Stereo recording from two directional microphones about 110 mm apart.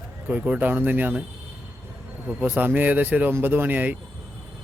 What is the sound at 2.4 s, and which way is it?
Speech, 15° right (ahead or behind).